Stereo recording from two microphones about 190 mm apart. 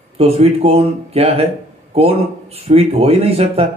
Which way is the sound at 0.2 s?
30° right (ahead or behind).